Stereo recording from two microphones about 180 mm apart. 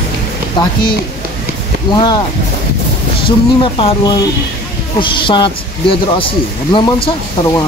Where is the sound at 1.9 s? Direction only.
20° left (ahead or behind).